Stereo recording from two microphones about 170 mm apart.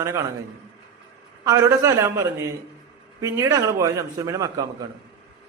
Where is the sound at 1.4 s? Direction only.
15° right (ahead or behind).